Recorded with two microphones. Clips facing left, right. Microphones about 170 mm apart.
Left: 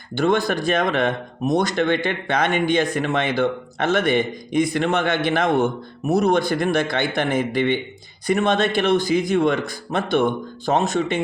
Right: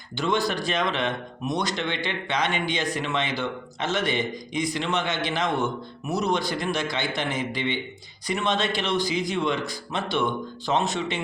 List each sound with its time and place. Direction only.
0.2 s speech: 50° left (ahead or behind)